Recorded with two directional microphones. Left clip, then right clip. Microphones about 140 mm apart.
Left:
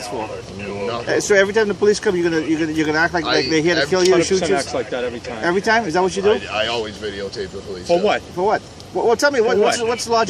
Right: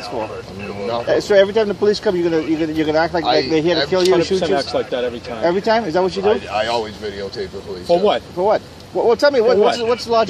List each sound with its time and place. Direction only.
0.8 s speech: 30° left (ahead or behind)
8.4 s speech: 40° left (ahead or behind)